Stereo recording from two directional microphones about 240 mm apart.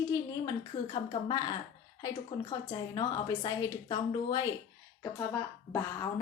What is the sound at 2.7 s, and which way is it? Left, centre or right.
A woman's voice, centre.